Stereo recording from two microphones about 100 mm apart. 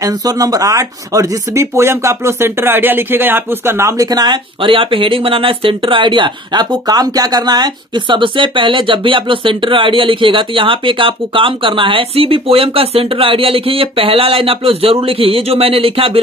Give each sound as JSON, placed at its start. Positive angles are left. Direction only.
{"t": 0.0, "sound": "speech", "side_deg": -35}
{"t": 4.6, "sound": "speech", "side_deg": -60}